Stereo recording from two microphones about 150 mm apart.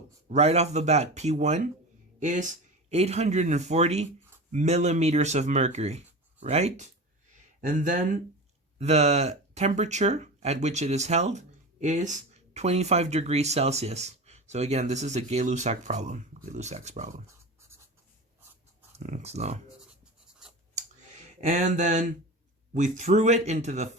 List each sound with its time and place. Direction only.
0.3 s speech: 45° right (ahead or behind)
2.9 s speech: 45° right (ahead or behind)
18.9 s speech: 50° right (ahead or behind)
21.4 s a sound: 55° right (ahead or behind)
22.7 s speech: 50° right (ahead or behind)